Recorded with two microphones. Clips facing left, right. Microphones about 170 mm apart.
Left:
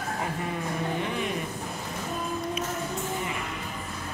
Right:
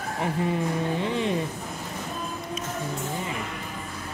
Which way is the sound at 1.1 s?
25° right (ahead or behind).